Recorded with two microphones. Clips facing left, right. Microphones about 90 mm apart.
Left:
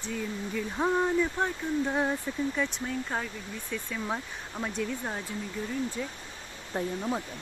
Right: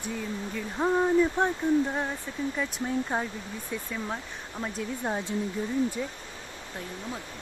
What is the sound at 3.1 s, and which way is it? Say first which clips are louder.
Speech: right 3 dB; 15° right (ahead or behind).